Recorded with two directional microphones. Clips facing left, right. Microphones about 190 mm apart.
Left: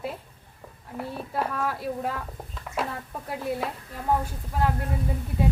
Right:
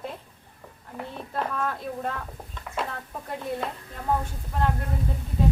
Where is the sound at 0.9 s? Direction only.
5° left (ahead or behind).